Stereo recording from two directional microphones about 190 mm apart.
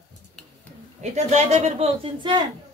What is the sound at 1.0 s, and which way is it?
Speech, 35° right (ahead or behind).